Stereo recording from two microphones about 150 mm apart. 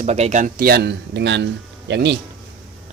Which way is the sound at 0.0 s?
50° right (ahead or behind).